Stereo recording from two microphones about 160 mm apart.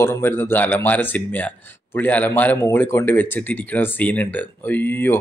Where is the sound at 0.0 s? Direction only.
15° left (ahead or behind).